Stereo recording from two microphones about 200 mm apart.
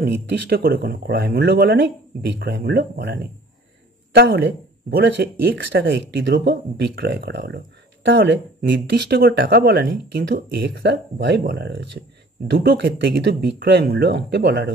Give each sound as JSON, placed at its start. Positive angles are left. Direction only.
{"t": 0.0, "sound": "speech", "side_deg": -45}